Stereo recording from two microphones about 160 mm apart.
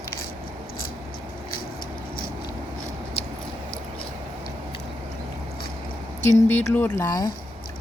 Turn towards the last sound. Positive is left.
turn(degrees=20)  # may be behind; listen again after turning